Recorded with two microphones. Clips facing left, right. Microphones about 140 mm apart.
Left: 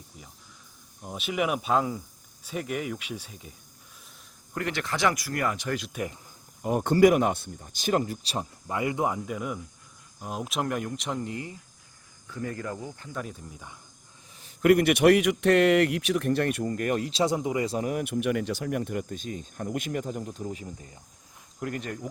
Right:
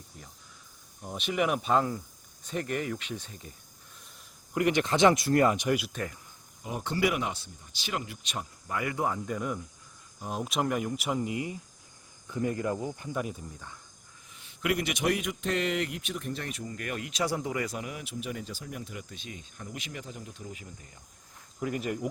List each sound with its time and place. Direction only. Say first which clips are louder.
1.0 s speech: left 1 dB; 5° left (ahead or behind)
4.5 s speech: right 5 dB; 15° right (ahead or behind)
5.9 s speech: left 3 dB; 15° left (ahead or behind)
6.6 s speech: left 10 dB; 50° left (ahead or behind); by 8.4 s 35° left (ahead or behind)
8.6 s speech: left 3 dB; 25° left (ahead or behind)
9.2 s speech: even; 5° left (ahead or behind); by 13.3 s 10° right (ahead or behind)
13.5 s speech: left 1 dB; 15° left (ahead or behind)
14.3 s a man's voice: left 10 dB; 45° left (ahead or behind); by 17.8 s 25° left (ahead or behind)
17.8 s speech: left 10 dB; 55° left (ahead or behind); by 21.0 s 30° left (ahead or behind)
21.6 s speech: right 1 dB; 5° right (ahead or behind)